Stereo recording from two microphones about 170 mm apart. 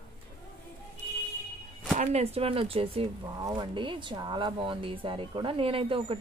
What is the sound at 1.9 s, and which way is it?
Speech, 40° right (ahead or behind).